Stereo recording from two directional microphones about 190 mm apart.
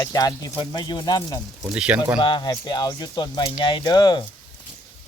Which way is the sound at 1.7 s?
5° right (ahead or behind).